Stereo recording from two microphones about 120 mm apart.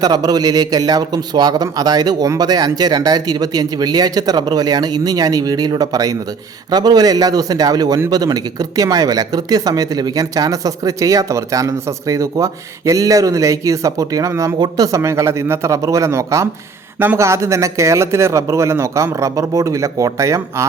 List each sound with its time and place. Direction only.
0.0 s a man's voice: 35° right (ahead or behind)